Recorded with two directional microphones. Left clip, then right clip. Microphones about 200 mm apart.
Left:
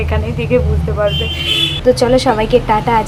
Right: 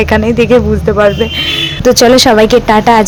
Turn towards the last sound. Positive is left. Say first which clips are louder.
# right 6 dB
turn(degrees=-35)  # may be behind; listen again after turning